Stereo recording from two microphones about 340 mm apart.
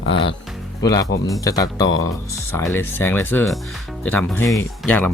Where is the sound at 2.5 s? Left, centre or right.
Centre.